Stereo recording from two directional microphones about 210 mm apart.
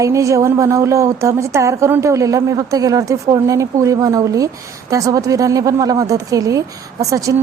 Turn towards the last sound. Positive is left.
turn(degrees=-15)  # may be behind; listen again after turning